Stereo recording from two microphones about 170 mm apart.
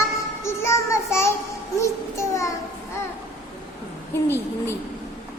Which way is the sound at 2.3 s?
20° left (ahead or behind).